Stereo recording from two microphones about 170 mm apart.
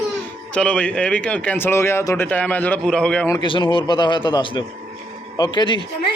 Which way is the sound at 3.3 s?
25° left (ahead or behind).